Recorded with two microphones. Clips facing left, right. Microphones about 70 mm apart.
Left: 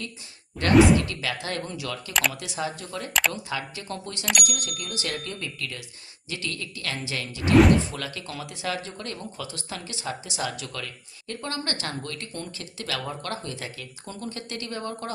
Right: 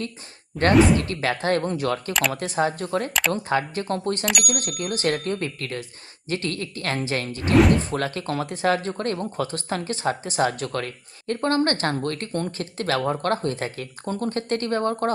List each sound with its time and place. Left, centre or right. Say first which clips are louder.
0.7 s speech: even; centre
0.9 s speech: right 3 dB; right
3.1 s speech: right 2 dB; centre
3.3 s speech: right 9 dB; right
7.5 s speech: even; centre
7.9 s speech: right 9 dB; right